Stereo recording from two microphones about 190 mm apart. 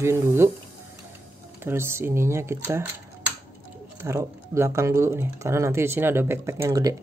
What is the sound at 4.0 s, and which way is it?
Speech, 15° right (ahead or behind).